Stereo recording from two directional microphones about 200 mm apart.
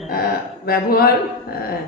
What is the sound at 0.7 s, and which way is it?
Speech, 50° left (ahead or behind).